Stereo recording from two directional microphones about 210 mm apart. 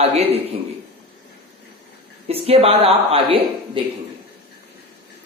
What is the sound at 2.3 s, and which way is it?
Speech, 25° right (ahead or behind).